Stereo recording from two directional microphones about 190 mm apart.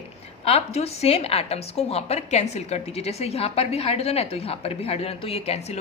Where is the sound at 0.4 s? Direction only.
35° left (ahead or behind).